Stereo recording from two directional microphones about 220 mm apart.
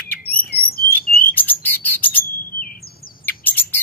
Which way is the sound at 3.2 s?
10° left (ahead or behind).